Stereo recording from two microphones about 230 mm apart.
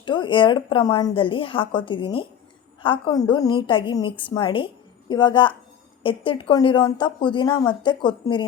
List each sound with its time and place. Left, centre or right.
0.0 s a woman's voice: left